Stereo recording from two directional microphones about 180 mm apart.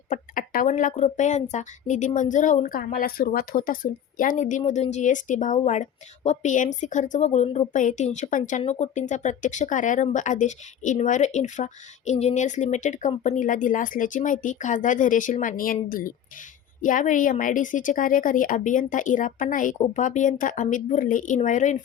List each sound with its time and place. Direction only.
0.1 s speech: 45° left (ahead or behind)